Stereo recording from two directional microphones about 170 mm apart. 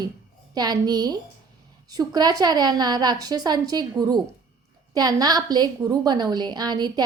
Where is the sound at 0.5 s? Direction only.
25° right (ahead or behind).